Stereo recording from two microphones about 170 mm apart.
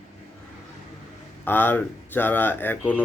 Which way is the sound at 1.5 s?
10° left (ahead or behind).